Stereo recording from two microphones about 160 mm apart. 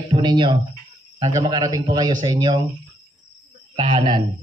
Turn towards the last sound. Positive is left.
turn(degrees=-30)  # may be behind; listen again after turning